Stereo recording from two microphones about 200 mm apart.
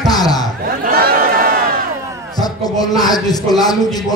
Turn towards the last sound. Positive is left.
turn(degrees=20)  # may be behind; listen again after turning